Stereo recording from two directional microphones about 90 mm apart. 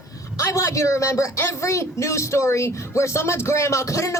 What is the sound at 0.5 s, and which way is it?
Speech, 35° left (ahead or behind).